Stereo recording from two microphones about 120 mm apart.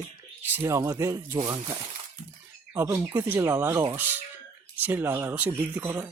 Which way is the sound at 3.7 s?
30° right (ahead or behind).